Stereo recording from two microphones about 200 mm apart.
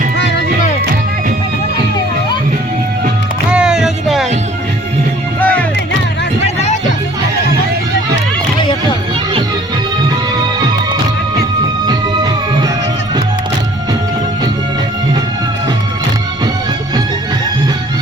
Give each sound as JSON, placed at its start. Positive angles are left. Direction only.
{"t": 3.5, "sound": "music", "side_deg": -5}
{"t": 5.4, "sound": "music", "side_deg": 5}
{"t": 6.4, "sound": "music", "side_deg": 35}
{"t": 11.9, "sound": "music", "side_deg": -20}